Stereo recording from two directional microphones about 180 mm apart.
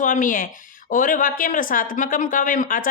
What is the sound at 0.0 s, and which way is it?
A woman's voice, 45° left (ahead or behind).